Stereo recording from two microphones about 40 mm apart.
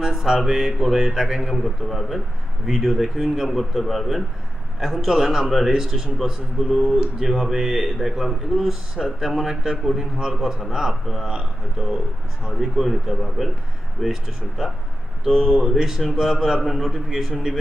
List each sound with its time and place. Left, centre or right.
0.0 s a man's voice: centre
15.5 s a man's voice: centre
17.1 s a man's voice: centre